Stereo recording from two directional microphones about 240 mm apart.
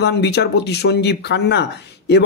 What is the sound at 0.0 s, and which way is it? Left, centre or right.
Speech, left.